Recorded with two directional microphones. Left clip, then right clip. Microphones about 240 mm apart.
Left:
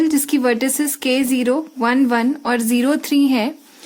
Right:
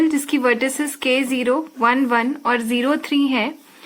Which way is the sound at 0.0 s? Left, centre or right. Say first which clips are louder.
Left 1 dB; left.